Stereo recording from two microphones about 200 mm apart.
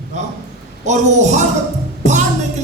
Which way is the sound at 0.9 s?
35° right (ahead or behind).